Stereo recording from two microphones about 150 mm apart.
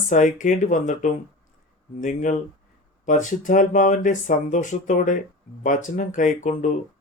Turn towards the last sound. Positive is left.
turn(degrees=55)  # may be behind; listen again after turning